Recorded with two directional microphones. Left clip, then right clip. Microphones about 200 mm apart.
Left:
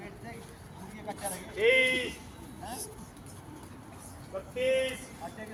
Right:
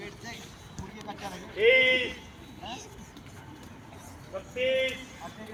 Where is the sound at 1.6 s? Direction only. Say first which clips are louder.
Right 3 dB; 35° right (ahead or behind).